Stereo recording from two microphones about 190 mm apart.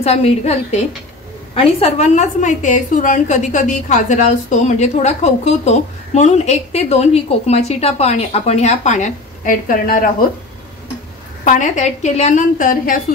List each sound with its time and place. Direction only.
0.0 s a woman's voice: 35° left (ahead or behind)
11.4 s a woman's voice: 40° left (ahead or behind)